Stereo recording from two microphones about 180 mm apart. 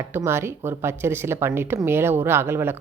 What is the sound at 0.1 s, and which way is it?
Speech, 15° right (ahead or behind).